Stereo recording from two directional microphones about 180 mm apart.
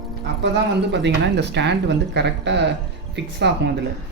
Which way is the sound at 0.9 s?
75° right (ahead or behind).